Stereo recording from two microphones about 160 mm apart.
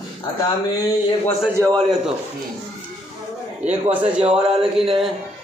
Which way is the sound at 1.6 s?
20° right (ahead or behind).